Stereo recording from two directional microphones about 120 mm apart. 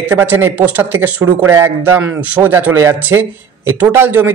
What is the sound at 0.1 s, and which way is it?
A man's voice, 15° right (ahead or behind).